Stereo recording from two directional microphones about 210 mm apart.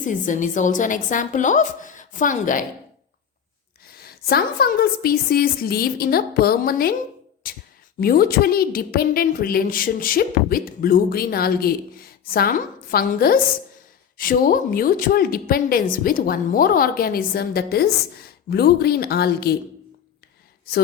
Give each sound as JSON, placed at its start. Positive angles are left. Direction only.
{"t": 0.0, "sound": "a woman's voice", "side_deg": 35}
{"t": 3.8, "sound": "a woman's voice", "side_deg": 45}